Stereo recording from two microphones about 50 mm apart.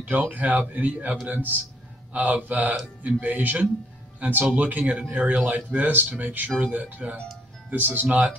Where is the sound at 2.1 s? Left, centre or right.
Right.